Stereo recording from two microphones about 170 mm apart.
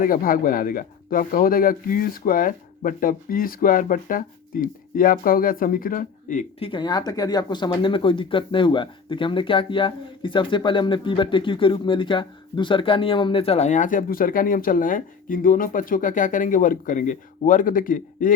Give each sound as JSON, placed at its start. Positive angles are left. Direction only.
{"t": 0.0, "sound": "speech", "side_deg": 55}
{"t": 6.6, "sound": "speech", "side_deg": 30}